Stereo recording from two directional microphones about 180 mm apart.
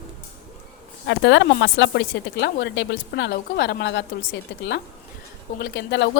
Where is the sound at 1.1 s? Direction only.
85° left.